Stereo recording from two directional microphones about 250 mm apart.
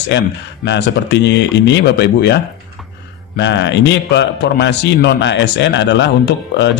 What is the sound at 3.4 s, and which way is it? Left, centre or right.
A man's voice, left.